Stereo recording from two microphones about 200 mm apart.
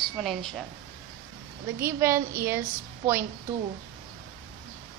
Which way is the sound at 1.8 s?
15° right (ahead or behind).